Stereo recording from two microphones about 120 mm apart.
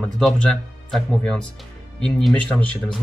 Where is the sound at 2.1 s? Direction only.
Centre (ahead or behind).